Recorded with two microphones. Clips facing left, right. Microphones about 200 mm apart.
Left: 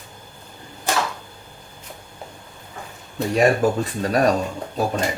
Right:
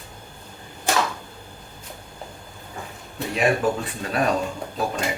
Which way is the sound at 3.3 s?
40° left (ahead or behind).